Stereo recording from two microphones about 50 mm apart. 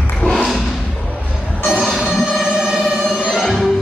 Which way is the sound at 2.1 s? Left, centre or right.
Centre.